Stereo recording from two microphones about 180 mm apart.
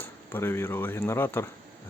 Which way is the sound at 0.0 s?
10° left (ahead or behind).